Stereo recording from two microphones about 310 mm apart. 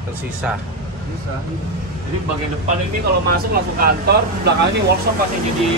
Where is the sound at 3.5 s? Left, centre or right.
Right.